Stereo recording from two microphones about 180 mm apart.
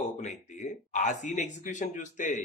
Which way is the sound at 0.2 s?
40° left (ahead or behind).